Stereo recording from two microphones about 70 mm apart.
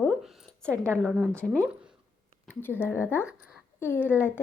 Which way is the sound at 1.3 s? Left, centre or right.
Centre.